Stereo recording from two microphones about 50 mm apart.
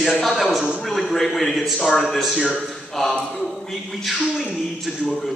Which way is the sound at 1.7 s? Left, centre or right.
Centre.